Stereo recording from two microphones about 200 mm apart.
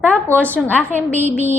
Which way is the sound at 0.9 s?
10° right (ahead or behind).